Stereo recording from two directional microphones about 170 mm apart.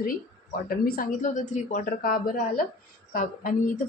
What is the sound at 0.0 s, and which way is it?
A woman's voice, 55° left (ahead or behind).